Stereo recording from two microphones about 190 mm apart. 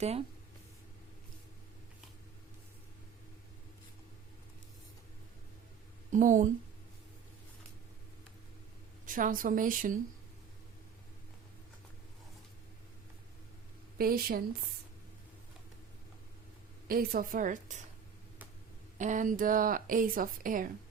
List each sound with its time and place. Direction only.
0.0 s speech: 35° right (ahead or behind)
6.1 s speech: 40° right (ahead or behind)
9.0 s a woman's voice: 45° right (ahead or behind)
14.0 s a woman's voice: 50° right (ahead or behind)
16.9 s a woman's voice: 50° right (ahead or behind)
18.9 s a woman's voice: 40° right (ahead or behind)